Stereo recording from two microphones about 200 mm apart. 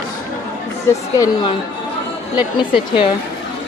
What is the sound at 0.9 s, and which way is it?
Speech, 15° left (ahead or behind).